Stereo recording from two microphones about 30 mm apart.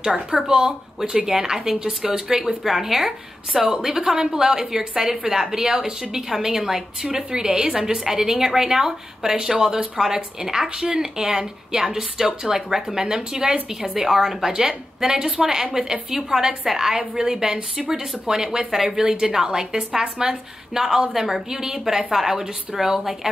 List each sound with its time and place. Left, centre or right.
0.0 s a woman's voice: right
1.1 s a woman's voice: centre
7.1 s a woman's voice: right; by 22.8 s centre